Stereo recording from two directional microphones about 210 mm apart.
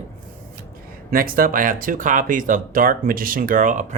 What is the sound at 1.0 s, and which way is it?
Speech, 45° right (ahead or behind).